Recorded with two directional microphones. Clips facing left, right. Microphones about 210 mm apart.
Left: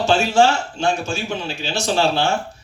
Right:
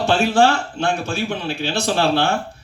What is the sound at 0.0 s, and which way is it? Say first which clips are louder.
Speech: even; 60° right (ahead or behind).